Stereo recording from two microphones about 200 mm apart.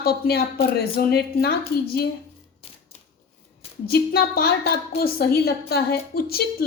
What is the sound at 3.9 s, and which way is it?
A woman's voice, 50° left (ahead or behind).